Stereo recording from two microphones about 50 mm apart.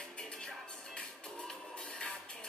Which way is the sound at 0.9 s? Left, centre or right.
Centre.